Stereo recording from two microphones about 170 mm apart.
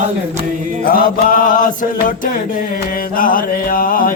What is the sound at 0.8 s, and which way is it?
Chant, 60° left (ahead or behind).